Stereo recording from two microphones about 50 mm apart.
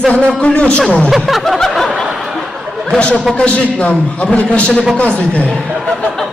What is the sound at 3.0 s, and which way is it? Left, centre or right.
Speech, left.